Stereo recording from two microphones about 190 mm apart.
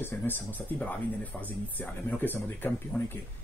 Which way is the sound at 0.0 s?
10° left (ahead or behind).